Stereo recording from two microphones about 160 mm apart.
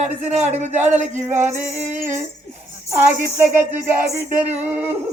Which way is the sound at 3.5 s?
10° right (ahead or behind).